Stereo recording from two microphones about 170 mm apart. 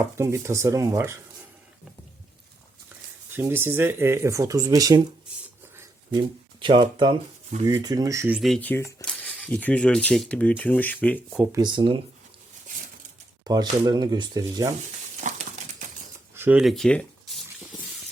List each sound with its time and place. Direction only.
0.0 s speech: 15° right (ahead or behind)
3.3 s speech: 15° right (ahead or behind)
6.1 s speech: 30° right (ahead or behind)
8.4 s speech: 5° left (ahead or behind)
11.5 s speech: 25° right (ahead or behind)
13.4 s speech: 25° right (ahead or behind)
15.2 s crumpling: 45° right (ahead or behind)
16.3 s a sound: 10° right (ahead or behind)